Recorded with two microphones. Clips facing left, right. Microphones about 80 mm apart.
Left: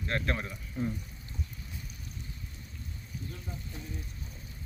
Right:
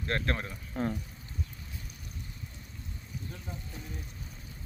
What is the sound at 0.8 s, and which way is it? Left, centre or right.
Speech, right.